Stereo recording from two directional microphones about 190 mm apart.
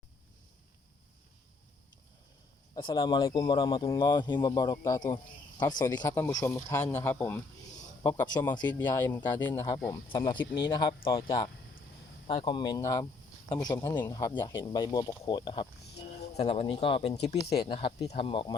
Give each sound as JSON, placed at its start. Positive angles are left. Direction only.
{"t": 2.7, "sound": "speech", "side_deg": 25}
{"t": 12.3, "sound": "speech", "side_deg": 25}